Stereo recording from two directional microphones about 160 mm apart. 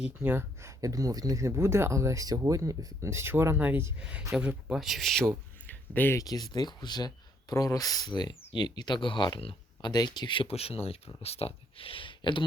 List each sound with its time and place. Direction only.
0.0 s speech: 10° right (ahead or behind)
5.6 s speech: 10° left (ahead or behind); by 12.5 s 30° left (ahead or behind)